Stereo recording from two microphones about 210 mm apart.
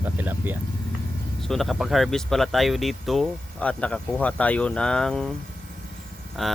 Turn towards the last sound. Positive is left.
turn(degrees=0)  # may be behind; listen again after turning